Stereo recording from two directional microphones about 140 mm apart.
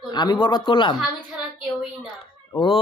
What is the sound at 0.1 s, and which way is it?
Speech, 30° left (ahead or behind).